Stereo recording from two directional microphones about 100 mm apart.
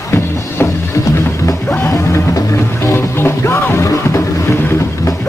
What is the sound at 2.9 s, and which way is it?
Music, 25° left (ahead or behind).